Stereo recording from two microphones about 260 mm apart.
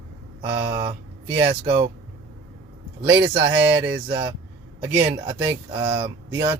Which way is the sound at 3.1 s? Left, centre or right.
Centre.